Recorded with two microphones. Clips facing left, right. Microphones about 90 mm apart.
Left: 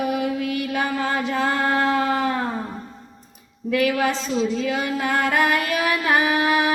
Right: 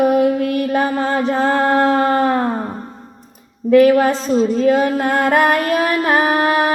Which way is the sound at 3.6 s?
40° right (ahead or behind).